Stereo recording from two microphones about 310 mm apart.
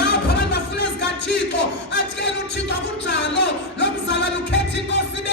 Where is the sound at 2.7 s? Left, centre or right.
Left.